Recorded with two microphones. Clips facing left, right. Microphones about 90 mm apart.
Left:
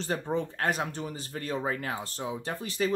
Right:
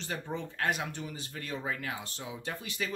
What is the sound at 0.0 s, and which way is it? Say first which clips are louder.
Speech: left 7 dB; 40° left (ahead or behind).